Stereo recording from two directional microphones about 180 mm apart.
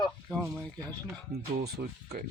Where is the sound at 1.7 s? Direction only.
60° right (ahead or behind).